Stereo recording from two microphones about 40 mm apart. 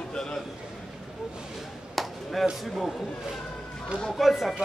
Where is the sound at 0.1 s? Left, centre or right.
Left.